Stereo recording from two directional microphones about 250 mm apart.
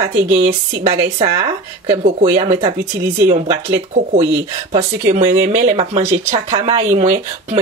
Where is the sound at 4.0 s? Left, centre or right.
Right.